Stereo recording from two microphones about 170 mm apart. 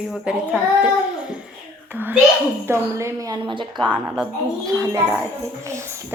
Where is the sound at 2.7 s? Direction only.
15° right (ahead or behind).